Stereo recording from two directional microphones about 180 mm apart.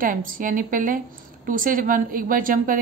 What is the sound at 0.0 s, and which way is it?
A woman's voice, 50° right (ahead or behind).